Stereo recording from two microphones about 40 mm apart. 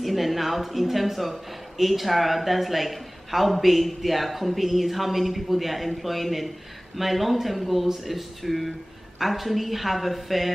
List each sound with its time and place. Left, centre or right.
0.0 s a woman's voice: centre